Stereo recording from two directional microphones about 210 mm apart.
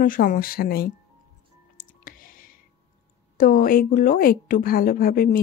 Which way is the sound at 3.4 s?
40° left (ahead or behind).